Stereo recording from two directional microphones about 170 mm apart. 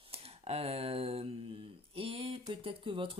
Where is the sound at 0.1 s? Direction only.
35° right (ahead or behind).